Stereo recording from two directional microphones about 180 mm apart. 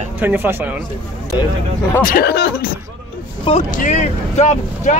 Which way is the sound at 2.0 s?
60° left (ahead or behind).